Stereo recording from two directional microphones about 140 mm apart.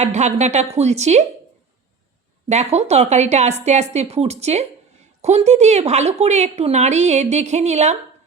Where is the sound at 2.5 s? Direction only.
55° right (ahead or behind).